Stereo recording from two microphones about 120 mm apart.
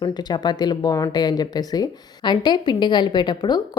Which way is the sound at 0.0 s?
35° left (ahead or behind).